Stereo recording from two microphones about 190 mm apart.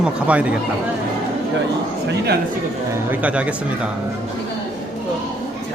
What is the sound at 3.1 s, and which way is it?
Speech, 5° right (ahead or behind).